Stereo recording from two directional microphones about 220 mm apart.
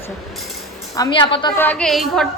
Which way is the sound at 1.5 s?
10° left (ahead or behind).